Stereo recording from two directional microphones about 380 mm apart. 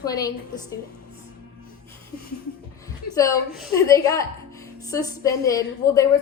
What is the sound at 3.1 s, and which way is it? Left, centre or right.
A woman's voice, centre.